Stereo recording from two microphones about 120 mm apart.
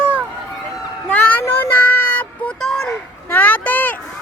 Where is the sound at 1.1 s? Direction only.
10° left (ahead or behind).